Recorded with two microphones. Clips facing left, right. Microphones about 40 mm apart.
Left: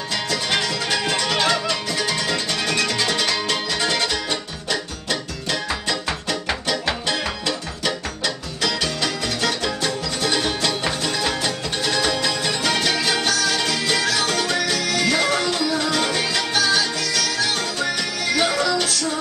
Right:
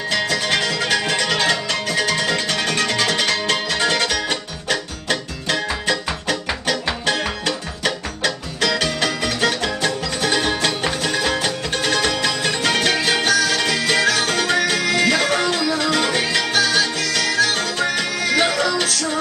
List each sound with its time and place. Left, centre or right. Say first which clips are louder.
0.9 s music: right 1 dB; right
10.2 s music: right 3 dB; right
11.4 s music: right 2 dB; right
13.2 s music: right 3 dB; right
17.7 s music: right 3 dB; right
18.4 s music: right 1 dB; right